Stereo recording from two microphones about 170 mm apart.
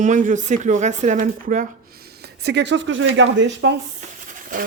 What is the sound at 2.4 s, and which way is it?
Speech, 90° right.